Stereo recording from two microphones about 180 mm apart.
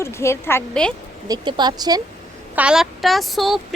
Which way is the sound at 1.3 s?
25° right (ahead or behind).